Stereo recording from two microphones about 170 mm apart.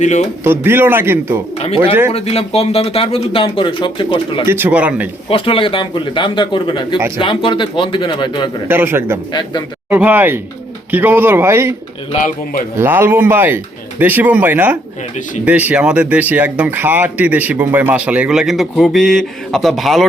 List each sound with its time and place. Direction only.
0.0 s speech: 45° left (ahead or behind)
0.4 s speech: 15° right (ahead or behind)
1.5 s speech: 35° left (ahead or behind)
4.4 s speech: 10° right (ahead or behind)
5.3 s a man's voice: 30° left (ahead or behind)
8.6 s speech: 15° right (ahead or behind)
9.3 s a man's voice: 25° left (ahead or behind)
9.9 s speech: 10° right (ahead or behind)
12.8 s speech: 15° right (ahead or behind)